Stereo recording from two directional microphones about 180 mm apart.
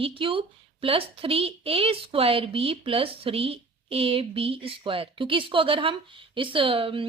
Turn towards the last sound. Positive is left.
turn(degrees=-30)  # may be behind; listen again after turning